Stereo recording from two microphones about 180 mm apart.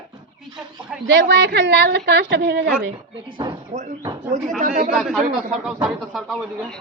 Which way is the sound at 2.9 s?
25° right (ahead or behind).